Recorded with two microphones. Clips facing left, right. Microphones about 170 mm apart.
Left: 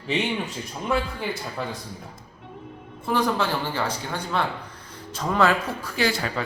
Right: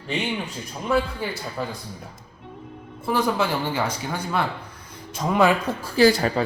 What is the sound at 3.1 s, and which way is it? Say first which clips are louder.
Speech: right 1 dB; 10° right (ahead or behind).